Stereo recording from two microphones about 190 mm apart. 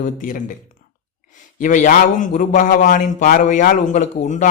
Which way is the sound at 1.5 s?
40° left (ahead or behind).